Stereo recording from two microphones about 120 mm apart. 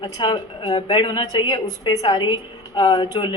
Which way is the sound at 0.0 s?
40° left (ahead or behind).